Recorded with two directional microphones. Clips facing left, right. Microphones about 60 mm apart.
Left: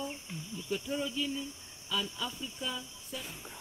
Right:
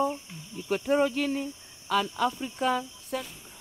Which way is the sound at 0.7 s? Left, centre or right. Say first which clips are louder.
Right 11 dB; right.